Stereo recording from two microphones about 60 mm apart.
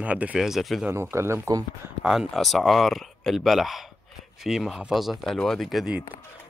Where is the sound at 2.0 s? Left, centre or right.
Centre.